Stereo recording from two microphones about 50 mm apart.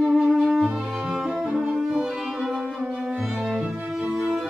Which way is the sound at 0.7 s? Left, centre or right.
Centre.